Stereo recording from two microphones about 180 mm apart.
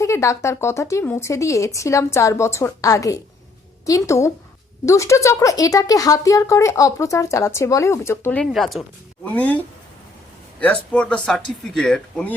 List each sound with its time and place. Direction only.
0.0 s a woman's voice: 15° left (ahead or behind)
10.6 s speech: 5° left (ahead or behind)